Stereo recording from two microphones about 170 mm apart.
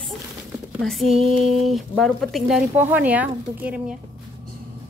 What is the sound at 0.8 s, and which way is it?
A woman's voice, centre (ahead or behind).